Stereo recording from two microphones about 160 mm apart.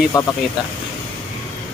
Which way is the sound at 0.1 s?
20° left (ahead or behind).